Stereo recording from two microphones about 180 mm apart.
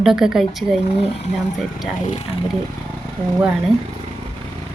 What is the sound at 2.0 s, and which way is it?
Speech, 40° left (ahead or behind).